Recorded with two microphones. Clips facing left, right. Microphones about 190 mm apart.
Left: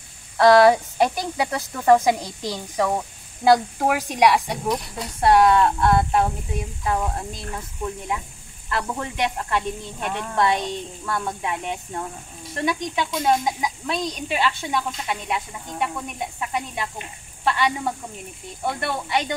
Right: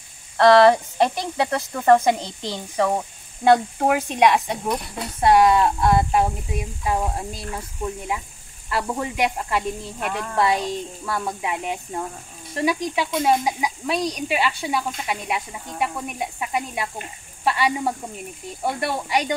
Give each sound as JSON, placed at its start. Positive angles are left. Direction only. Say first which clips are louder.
{"t": 0.4, "sound": "speech", "louder": "even", "side_deg": 5}
{"t": 2.1, "sound": "a woman's voice", "louder": "left 1 dB", "side_deg": -25}
{"t": 2.5, "sound": "speech", "louder": "right 2 dB", "side_deg": 0}
{"t": 5.2, "sound": "speech", "louder": "even", "side_deg": -5}